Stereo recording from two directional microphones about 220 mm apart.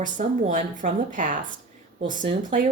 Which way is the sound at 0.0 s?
35° right (ahead or behind).